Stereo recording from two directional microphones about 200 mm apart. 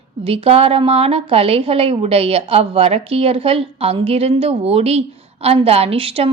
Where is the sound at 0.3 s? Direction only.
30° right (ahead or behind).